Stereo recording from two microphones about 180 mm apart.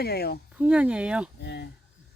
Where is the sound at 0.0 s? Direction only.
60° left (ahead or behind).